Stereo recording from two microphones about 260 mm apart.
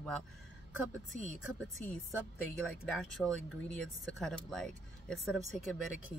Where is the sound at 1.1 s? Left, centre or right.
Right.